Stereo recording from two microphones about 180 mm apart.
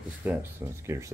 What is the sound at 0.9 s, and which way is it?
Speech, 15° right (ahead or behind).